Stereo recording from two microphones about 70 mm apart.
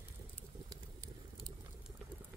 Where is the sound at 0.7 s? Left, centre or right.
Right.